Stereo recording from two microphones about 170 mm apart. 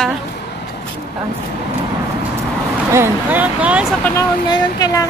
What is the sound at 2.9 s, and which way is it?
Speech, 10° right (ahead or behind).